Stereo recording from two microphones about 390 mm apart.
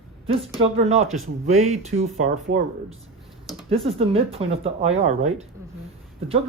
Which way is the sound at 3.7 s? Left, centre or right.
Centre.